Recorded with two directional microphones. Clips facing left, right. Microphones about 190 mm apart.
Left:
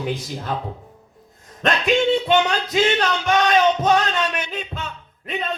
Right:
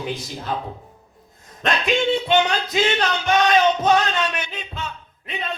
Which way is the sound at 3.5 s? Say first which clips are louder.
Even; 45° left (ahead or behind).